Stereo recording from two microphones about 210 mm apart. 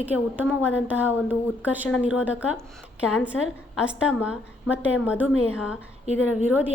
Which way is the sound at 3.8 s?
5° right (ahead or behind).